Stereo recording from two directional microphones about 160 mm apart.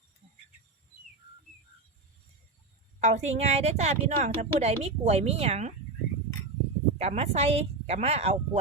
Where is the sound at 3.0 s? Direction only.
45° right (ahead or behind).